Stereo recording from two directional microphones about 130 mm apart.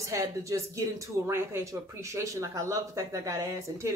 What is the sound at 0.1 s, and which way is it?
Speech, 25° right (ahead or behind).